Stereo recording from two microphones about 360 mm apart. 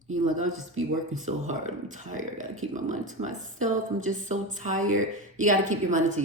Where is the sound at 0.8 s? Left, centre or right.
Right.